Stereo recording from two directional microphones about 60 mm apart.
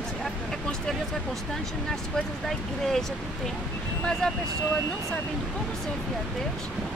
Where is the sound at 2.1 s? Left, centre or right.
Centre.